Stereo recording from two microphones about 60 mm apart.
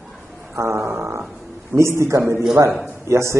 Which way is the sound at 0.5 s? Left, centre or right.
Right.